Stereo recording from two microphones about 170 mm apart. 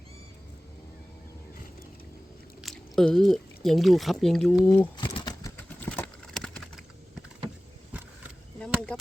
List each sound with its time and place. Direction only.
2.6 s speech: 5° left (ahead or behind)
4.6 s speech: 10° left (ahead or behind)
4.9 s pigeon: 25° left (ahead or behind)
5.8 s clip-clop: 5° left (ahead or behind)